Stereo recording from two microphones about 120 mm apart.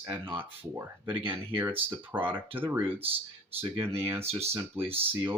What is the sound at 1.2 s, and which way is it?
Speech, 50° right (ahead or behind).